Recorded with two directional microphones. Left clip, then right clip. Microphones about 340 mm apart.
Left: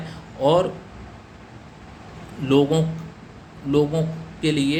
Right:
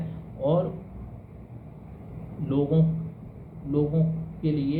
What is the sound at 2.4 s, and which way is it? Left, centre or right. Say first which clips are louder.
Speech: left 8 dB; left.